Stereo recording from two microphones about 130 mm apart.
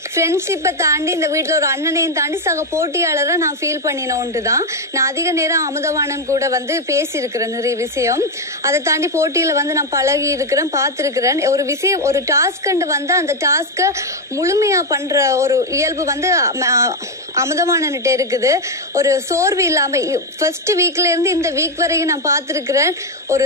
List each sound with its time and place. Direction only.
0.1 s a woman's voice: 20° right (ahead or behind)